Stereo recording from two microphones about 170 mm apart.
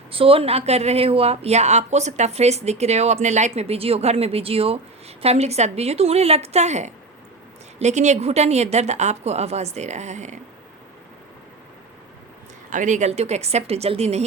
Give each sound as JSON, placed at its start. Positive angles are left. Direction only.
{"t": 0.1, "sound": "speech", "side_deg": -35}
{"t": 12.7, "sound": "speech", "side_deg": -45}